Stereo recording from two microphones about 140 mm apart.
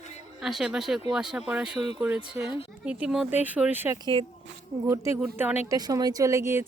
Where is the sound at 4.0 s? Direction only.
40° right (ahead or behind).